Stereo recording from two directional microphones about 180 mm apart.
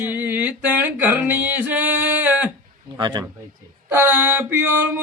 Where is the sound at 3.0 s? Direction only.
25° right (ahead or behind).